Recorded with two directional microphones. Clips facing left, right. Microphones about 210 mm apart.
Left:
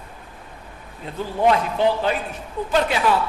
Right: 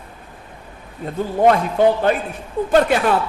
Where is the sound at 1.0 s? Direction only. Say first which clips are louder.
Right 4 dB; 50° right (ahead or behind).